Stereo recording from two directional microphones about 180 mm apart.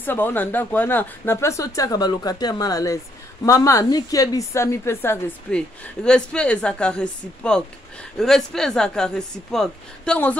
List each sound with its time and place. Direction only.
0.0 s speech: 10° left (ahead or behind)